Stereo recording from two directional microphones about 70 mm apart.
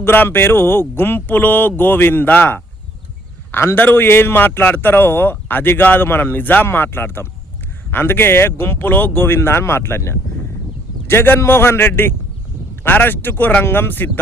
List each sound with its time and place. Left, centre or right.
0.0 s a man's voice: left